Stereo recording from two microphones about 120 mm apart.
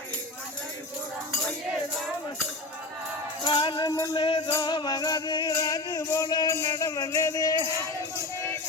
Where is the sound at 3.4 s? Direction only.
40° left (ahead or behind).